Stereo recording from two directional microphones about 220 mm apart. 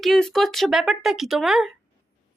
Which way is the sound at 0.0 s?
Centre (ahead or behind).